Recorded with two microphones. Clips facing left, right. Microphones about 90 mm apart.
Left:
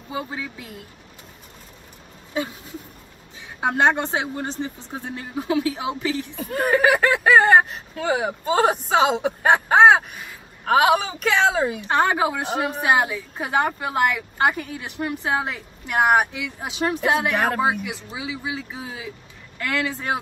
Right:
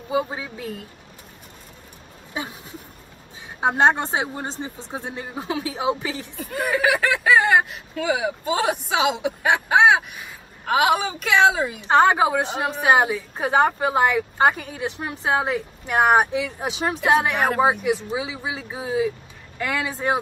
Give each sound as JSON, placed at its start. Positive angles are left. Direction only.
{"t": 0.1, "sound": "speech", "side_deg": -25}
{"t": 2.3, "sound": "speech", "side_deg": -20}
{"t": 6.4, "sound": "a woman's voice", "side_deg": 50}
{"t": 11.9, "sound": "speech", "side_deg": -20}